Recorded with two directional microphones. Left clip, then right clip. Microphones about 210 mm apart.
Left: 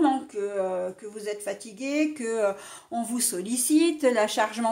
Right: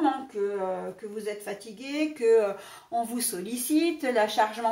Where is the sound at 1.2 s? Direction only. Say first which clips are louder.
Left 5 dB; 45° left (ahead or behind).